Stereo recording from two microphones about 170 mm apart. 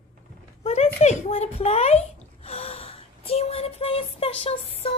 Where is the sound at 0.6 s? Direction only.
40° left (ahead or behind).